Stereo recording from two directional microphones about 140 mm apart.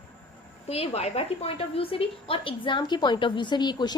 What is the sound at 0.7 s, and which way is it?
A woman's voice, 45° left (ahead or behind).